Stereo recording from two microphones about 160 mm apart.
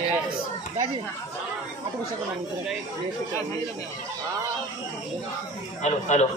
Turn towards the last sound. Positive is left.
turn(degrees=50)  # may be behind; listen again after turning